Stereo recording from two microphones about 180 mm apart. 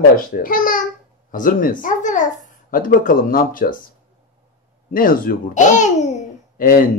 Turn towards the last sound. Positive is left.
turn(degrees=50)  # may be behind; listen again after turning